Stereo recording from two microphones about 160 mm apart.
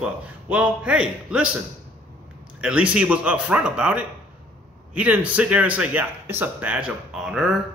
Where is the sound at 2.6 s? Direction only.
5° right (ahead or behind).